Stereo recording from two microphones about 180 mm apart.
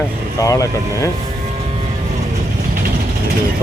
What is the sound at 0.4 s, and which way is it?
Speech, 20° left (ahead or behind).